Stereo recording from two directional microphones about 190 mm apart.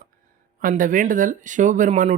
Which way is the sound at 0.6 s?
45° right (ahead or behind).